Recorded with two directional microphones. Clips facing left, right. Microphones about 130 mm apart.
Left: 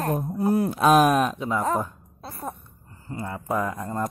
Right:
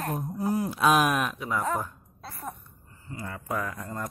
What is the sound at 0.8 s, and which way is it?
Speech, 40° left (ahead or behind).